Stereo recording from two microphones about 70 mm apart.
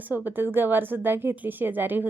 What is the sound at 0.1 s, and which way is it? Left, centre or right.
A woman's voice, right.